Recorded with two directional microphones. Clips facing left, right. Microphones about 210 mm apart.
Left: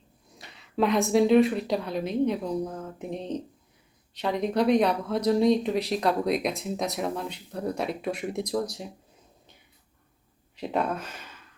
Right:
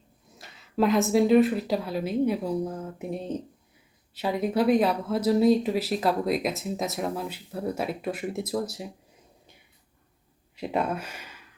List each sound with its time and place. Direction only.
0.3 s speech: centre (ahead or behind)
10.6 s speech: 5° right (ahead or behind)